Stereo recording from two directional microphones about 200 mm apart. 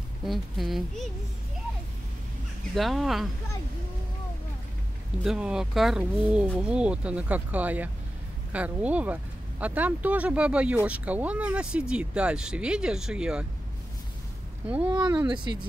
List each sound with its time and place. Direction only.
0.2 s speech: centre (ahead or behind)
2.7 s speech: centre (ahead or behind)
5.2 s speech: 5° right (ahead or behind)
14.9 s speech: 20° right (ahead or behind)